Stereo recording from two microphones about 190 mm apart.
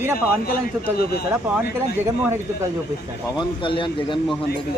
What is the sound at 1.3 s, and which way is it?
Speech, 10° right (ahead or behind).